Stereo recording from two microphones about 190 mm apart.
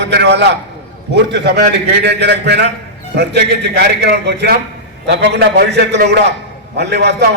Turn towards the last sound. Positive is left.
turn(degrees=-60)  # may be behind; listen again after turning